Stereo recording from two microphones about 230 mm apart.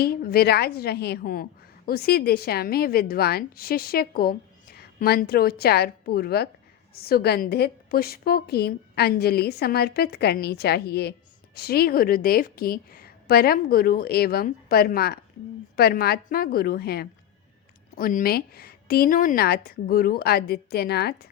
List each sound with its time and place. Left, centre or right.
0.0 s a woman's voice: left